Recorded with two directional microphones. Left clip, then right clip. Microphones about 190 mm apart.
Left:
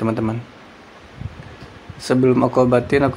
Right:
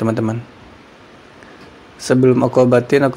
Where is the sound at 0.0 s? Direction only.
15° right (ahead or behind).